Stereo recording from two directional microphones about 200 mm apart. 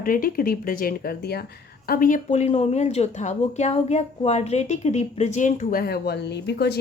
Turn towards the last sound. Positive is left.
turn(degrees=55)  # may be behind; listen again after turning